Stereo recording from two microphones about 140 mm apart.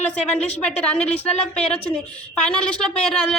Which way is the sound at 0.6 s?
10° left (ahead or behind).